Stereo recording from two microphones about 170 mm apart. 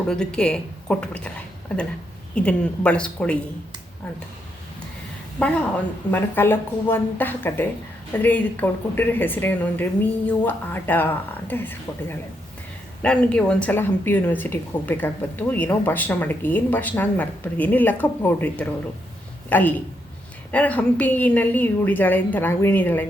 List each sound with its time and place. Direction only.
0.1 s speech: 5° left (ahead or behind)
2.3 s speech: 5° left (ahead or behind)
6.1 s a woman's voice: 10° left (ahead or behind)